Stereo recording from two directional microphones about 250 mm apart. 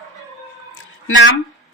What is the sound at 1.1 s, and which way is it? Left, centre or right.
Speech, left.